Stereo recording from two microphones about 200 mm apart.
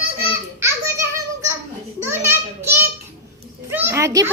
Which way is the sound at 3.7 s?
10° right (ahead or behind).